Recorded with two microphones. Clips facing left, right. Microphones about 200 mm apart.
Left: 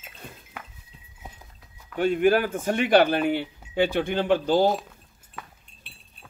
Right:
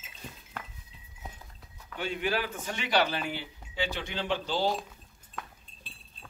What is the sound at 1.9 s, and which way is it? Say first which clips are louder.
Speech: left 11 dB; 50° left (ahead or behind).